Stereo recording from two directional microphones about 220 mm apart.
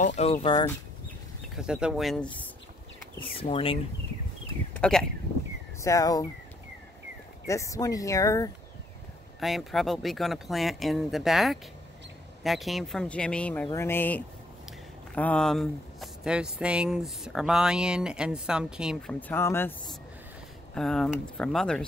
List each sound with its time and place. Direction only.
0.0 s speech: 30° left (ahead or behind)
1.6 s speech: 5° right (ahead or behind)
3.2 s speech: 25° left (ahead or behind)
4.7 s speech: 5° left (ahead or behind)
5.8 s speech: 15° left (ahead or behind)
7.4 s speech: 15° left (ahead or behind)
9.4 s speech: centre (ahead or behind)